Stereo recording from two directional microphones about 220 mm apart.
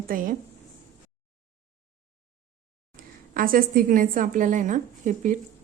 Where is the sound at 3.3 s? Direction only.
40° right (ahead or behind).